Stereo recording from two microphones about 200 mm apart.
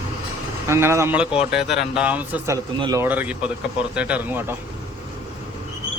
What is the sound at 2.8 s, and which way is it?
Speech, 20° right (ahead or behind).